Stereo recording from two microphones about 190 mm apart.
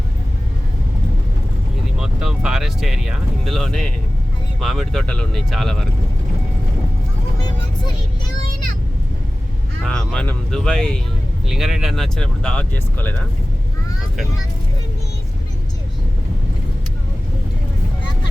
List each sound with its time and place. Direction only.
2.0 s speech: 5° right (ahead or behind)
9.8 s speech: 5° left (ahead or behind)